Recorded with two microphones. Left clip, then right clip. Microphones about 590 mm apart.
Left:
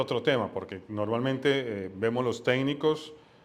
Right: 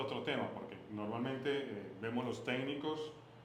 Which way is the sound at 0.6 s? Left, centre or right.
Left.